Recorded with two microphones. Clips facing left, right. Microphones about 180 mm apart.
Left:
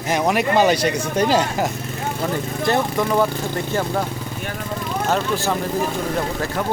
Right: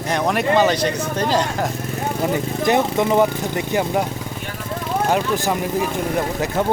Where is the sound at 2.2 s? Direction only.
20° right (ahead or behind).